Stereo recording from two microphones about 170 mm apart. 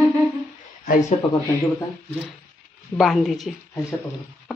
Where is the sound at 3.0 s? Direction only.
Centre (ahead or behind).